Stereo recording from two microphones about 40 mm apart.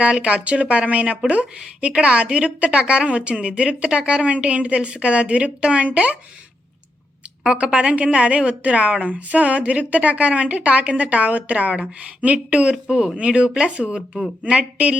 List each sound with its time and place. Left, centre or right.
0.0 s a woman's voice: right
7.4 s a woman's voice: right